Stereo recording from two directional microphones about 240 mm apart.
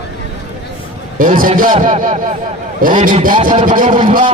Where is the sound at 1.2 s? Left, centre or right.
Right.